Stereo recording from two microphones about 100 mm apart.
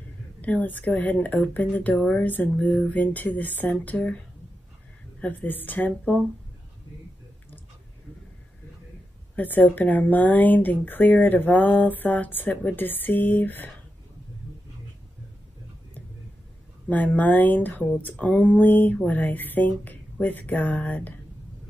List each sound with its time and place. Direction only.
0.4 s speech: 15° left (ahead or behind)
5.2 s speech: 15° left (ahead or behind)
9.3 s speech: 15° left (ahead or behind)
16.9 s speech: 15° left (ahead or behind)